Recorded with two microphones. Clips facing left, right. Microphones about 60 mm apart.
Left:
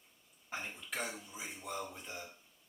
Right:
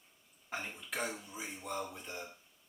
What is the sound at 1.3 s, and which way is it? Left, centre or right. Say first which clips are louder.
Speech: right 2 dB; centre.